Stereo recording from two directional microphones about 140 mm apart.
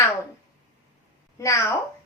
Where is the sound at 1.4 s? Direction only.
20° left (ahead or behind).